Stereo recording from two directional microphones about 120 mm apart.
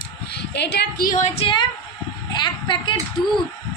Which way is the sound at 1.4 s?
45° left (ahead or behind).